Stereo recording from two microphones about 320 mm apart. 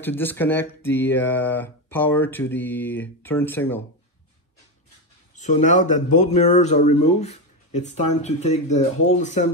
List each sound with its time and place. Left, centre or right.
0.0 s speech: centre
5.4 s speech: left